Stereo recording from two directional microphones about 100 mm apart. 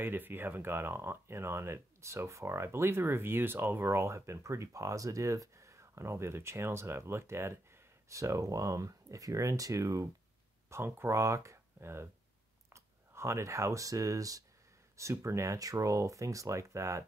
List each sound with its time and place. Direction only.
0.0 s speech: 20° right (ahead or behind)